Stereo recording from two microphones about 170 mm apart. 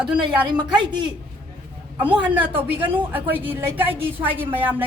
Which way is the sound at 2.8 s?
10° right (ahead or behind).